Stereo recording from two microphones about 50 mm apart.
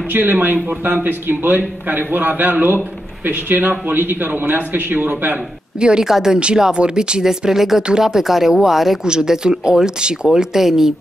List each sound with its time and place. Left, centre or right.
0.1 s a man's voice: right
5.8 s speech: centre